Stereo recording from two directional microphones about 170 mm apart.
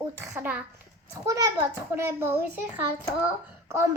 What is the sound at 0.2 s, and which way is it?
Speech, 10° right (ahead or behind).